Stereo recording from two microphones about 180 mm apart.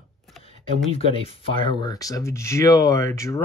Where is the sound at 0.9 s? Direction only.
30° left (ahead or behind).